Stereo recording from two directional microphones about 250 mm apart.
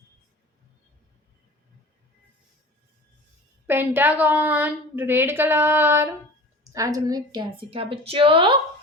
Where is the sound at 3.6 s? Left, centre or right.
Centre.